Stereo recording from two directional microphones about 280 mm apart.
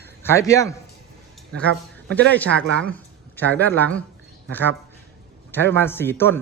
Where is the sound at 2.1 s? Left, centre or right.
Centre.